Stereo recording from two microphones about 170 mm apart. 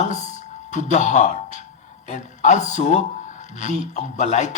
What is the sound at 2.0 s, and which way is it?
A man's voice, 45° left (ahead or behind).